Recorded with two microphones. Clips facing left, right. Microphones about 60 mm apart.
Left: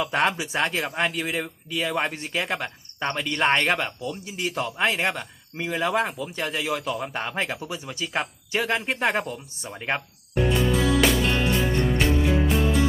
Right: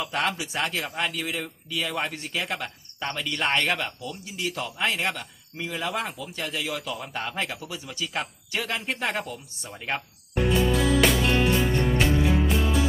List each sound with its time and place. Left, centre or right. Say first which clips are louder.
0.0 s speech: left 4 dB; left
7.5 s speech: left 4 dB; left
8.9 s speech: left 2 dB; centre
9.1 s speech: left 4 dB; left
11.0 s music: even; centre